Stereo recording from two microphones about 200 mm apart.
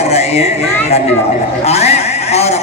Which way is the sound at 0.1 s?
30° left (ahead or behind).